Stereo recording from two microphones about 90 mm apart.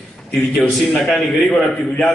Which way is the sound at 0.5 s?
Centre (ahead or behind).